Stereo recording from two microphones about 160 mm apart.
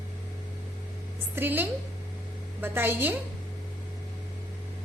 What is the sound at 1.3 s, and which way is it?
A woman's voice, 10° right (ahead or behind).